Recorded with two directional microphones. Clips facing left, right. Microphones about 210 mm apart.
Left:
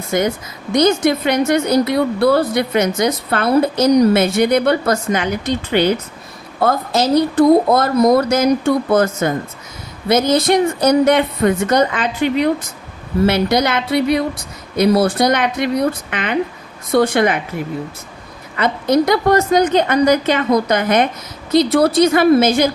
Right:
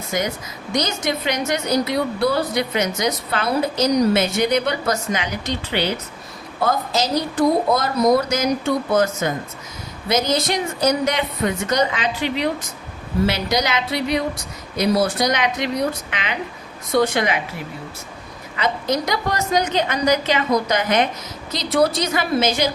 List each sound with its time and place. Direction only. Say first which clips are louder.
0.1 s a woman's voice: left 6 dB; 55° left (ahead or behind)
18.5 s a woman's voice: left 7 dB; 55° left (ahead or behind)